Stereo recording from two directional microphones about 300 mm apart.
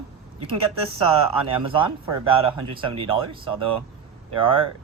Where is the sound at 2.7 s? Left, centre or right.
Centre.